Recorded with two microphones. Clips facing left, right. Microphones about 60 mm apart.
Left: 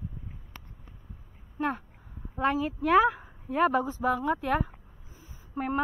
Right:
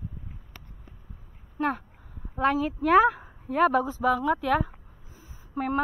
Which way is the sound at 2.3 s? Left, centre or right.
Right.